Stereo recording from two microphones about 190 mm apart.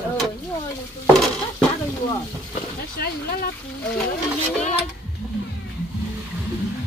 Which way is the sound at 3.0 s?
55° left (ahead or behind).